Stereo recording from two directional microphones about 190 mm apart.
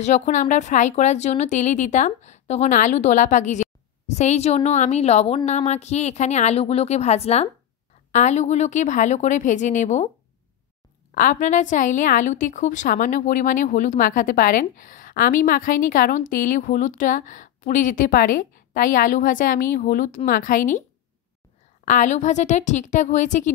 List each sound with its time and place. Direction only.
0.0 s a woman's voice: 40° left (ahead or behind)
11.1 s a woman's voice: 45° left (ahead or behind)
21.8 s a woman's voice: 40° left (ahead or behind)